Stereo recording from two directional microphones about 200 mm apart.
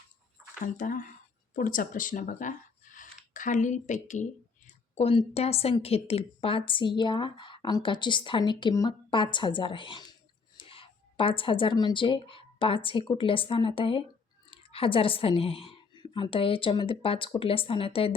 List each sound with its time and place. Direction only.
0.6 s a woman's voice: 40° left (ahead or behind)